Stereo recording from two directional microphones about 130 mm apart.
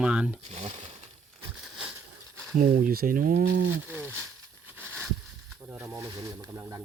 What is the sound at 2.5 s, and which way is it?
Speech, 90° right.